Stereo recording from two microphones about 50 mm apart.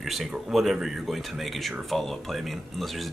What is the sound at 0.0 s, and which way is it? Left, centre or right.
Speech, centre.